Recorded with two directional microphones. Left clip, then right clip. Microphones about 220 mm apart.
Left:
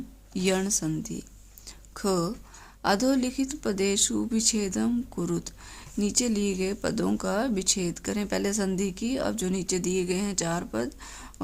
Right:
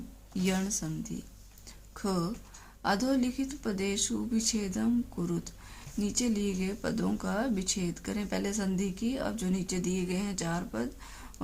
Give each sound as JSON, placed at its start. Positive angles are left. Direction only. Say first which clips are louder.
{"t": 0.3, "sound": "speech", "louder": "left 6 dB", "side_deg": 50}
{"t": 1.6, "sound": "a sound", "louder": "left 6 dB", "side_deg": 50}
{"t": 2.8, "sound": "speech", "louder": "left 5 dB", "side_deg": 45}